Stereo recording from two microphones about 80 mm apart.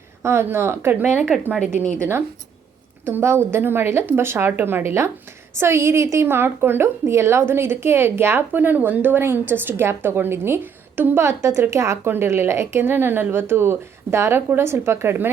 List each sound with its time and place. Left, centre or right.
0.2 s a woman's voice: right
3.0 s a woman's voice: right